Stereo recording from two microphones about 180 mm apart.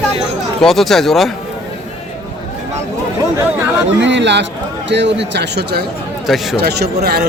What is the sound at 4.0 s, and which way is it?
Speech, 80° right.